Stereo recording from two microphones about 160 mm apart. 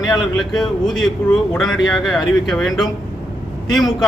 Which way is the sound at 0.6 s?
Centre (ahead or behind).